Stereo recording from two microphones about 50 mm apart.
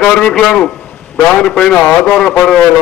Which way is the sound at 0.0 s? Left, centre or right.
Centre.